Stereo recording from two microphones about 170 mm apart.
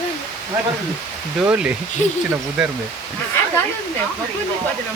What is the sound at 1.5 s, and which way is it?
Speech, 5° right (ahead or behind).